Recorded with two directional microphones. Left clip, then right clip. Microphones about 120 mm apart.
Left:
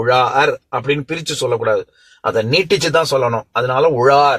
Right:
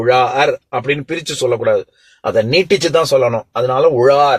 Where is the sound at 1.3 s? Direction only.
35° right (ahead or behind).